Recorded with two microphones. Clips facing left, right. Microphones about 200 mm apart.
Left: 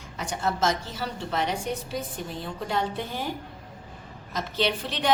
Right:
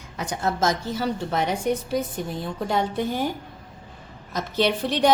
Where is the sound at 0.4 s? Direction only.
40° right (ahead or behind).